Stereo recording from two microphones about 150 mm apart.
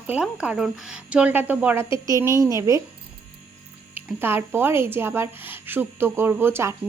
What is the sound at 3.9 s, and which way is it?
Speech, 15° right (ahead or behind).